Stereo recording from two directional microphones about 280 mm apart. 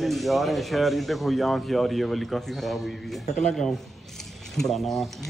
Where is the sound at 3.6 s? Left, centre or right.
Centre.